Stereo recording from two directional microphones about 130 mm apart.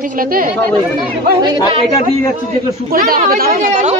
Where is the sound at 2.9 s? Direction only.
90° right.